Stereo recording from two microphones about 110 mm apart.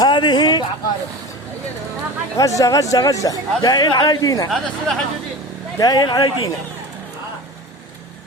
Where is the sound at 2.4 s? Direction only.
30° left (ahead or behind).